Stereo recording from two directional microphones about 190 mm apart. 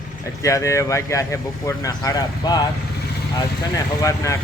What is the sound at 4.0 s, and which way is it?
Speech, 15° left (ahead or behind).